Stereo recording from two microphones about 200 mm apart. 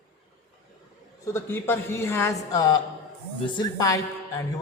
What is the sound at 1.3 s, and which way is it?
Speech, 10° left (ahead or behind).